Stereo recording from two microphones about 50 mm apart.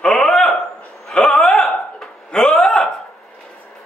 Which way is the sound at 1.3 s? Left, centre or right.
Centre.